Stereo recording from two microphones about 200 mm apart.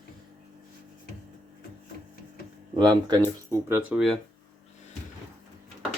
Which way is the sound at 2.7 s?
20° right (ahead or behind).